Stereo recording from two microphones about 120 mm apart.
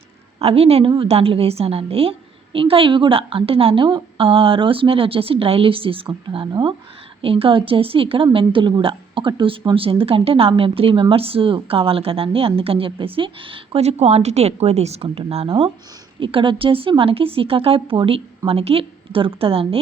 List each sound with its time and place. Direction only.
0.3 s a woman's voice: 55° right (ahead or behind)